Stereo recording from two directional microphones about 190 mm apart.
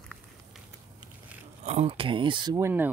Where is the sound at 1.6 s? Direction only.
35° right (ahead or behind); by 2.8 s 15° right (ahead or behind).